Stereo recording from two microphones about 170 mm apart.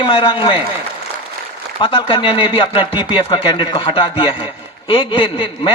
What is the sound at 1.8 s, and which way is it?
A man's voice, 30° left (ahead or behind).